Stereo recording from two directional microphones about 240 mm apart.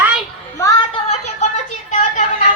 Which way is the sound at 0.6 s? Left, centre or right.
Centre.